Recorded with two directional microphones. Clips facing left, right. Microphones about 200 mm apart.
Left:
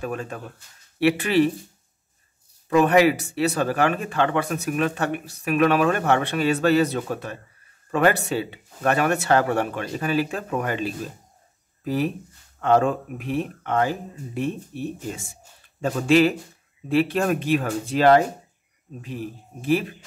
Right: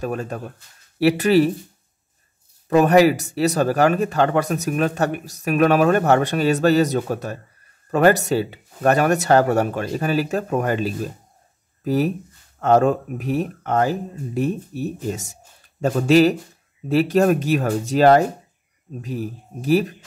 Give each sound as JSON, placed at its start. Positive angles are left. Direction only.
{"t": 0.0, "sound": "speech", "side_deg": -40}
{"t": 2.7, "sound": "speech", "side_deg": -40}